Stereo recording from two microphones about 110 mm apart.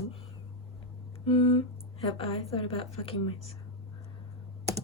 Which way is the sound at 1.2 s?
60° left (ahead or behind).